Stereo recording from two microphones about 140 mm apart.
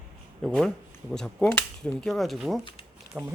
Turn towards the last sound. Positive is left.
turn(degrees=-15)  # may be behind; listen again after turning